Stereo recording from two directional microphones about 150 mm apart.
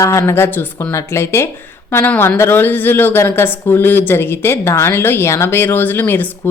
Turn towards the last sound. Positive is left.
turn(degrees=15)  # may be behind; listen again after turning